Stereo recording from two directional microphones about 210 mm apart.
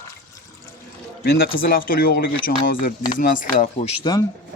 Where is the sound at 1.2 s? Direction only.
45° left (ahead or behind).